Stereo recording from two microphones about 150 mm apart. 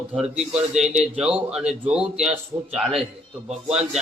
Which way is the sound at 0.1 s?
5° right (ahead or behind).